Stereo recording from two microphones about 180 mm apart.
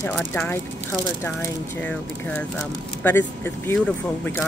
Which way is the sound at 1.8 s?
10° left (ahead or behind).